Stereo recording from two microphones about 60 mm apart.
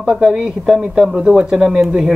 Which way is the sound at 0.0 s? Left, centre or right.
Centre.